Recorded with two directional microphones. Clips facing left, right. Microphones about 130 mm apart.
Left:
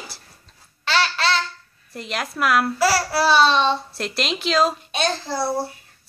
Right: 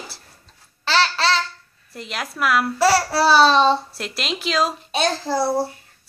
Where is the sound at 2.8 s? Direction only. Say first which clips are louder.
Right 5 dB; 35° right (ahead or behind).